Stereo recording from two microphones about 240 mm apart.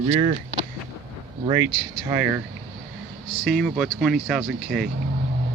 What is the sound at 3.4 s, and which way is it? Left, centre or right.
Speech, centre.